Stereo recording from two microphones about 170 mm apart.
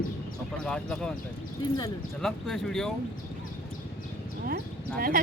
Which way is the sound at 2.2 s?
Centre (ahead or behind).